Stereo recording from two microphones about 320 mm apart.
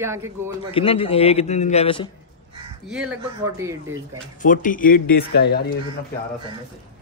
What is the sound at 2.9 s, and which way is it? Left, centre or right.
Speech, centre.